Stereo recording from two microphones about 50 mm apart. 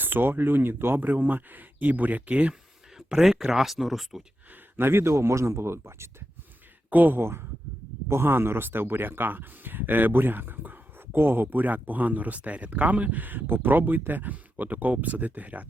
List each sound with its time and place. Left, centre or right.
0.0 s speech: right
3.1 s speech: centre
4.8 s speech: right
6.9 s speech: right
7.2 s speech: right